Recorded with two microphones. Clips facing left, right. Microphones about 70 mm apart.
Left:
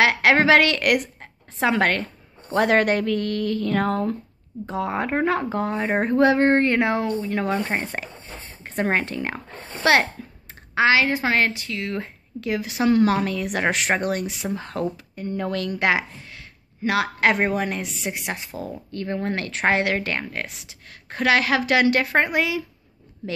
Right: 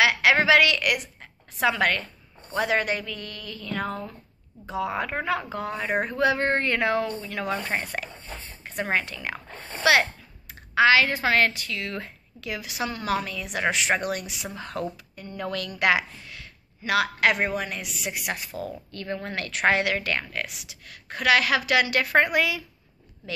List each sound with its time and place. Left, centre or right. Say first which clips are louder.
0.0 s a woman's voice: left 3 dB; left
4.6 s a woman's voice: left 3 dB; left
8.6 s speech: left 4 dB; left
10.7 s a woman's voice: left 1 dB; left
12.9 s speech: left 10 dB; left
13.9 s a woman's voice: left 4 dB; left